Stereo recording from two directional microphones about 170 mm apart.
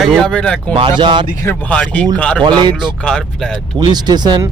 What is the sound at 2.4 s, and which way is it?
Speech, 25° right (ahead or behind).